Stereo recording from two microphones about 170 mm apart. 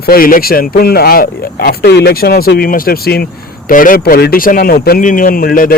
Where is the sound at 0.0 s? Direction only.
60° left (ahead or behind).